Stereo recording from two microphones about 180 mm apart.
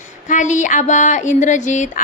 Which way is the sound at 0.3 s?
45° left (ahead or behind).